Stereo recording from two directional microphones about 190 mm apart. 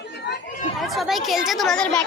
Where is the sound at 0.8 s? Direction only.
Centre (ahead or behind).